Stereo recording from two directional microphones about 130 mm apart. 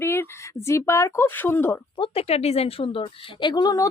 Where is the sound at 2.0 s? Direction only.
50° left (ahead or behind); by 3.9 s 30° left (ahead or behind).